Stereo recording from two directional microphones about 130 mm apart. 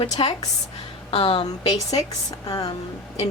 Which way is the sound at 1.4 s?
30° left (ahead or behind).